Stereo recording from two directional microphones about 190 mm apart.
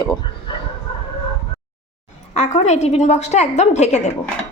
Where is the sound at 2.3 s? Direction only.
35° left (ahead or behind).